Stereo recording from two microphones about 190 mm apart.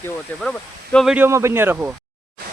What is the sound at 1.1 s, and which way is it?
Speech, 10° right (ahead or behind).